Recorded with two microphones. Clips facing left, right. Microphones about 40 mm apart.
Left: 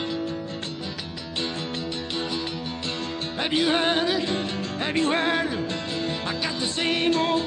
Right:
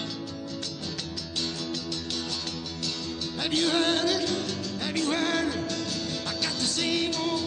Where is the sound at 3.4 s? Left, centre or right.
Left.